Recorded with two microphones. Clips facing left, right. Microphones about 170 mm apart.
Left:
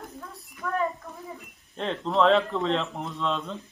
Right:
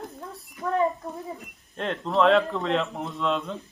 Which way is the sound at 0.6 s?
30° right (ahead or behind).